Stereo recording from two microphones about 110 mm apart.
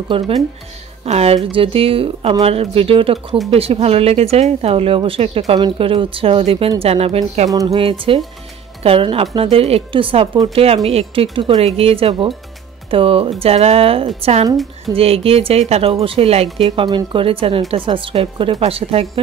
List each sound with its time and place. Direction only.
0.1 s a woman's voice: 55° right (ahead or behind)
1.0 s a woman's voice: 75° right (ahead or behind)
7.4 s speech: 30° right (ahead or behind)
8.1 s a woman's voice: 55° right (ahead or behind)
10.5 s a woman's voice: 60° right (ahead or behind)
13.4 s a woman's voice: 70° right (ahead or behind)
14.2 s speech: 80° right
14.9 s a woman's voice: 60° right (ahead or behind)
16.5 s a woman's voice: 50° right (ahead or behind)